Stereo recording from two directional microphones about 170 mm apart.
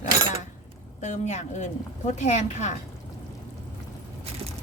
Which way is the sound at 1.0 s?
45° left (ahead or behind).